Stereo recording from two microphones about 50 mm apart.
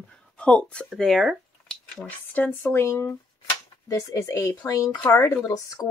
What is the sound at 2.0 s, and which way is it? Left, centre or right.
Speech, left.